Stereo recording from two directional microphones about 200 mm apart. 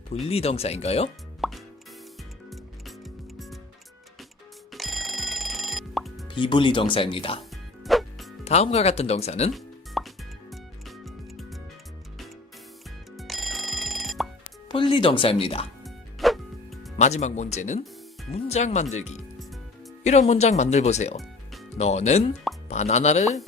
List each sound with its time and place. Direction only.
0.3 s speech: 30° left (ahead or behind)
1.4 s plop: centre (ahead or behind)
2.5 s music: centre (ahead or behind)
4.7 s music: centre (ahead or behind)
6.2 s speech: 25° left (ahead or behind)
7.5 s music: centre (ahead or behind)
8.4 s speech: 30° left (ahead or behind)
9.5 s music: centre (ahead or behind)
13.1 s music: centre (ahead or behind)
14.7 s speech: 25° left (ahead or behind)
15.8 s music: centre (ahead or behind)
17.0 s speech: 35° left (ahead or behind)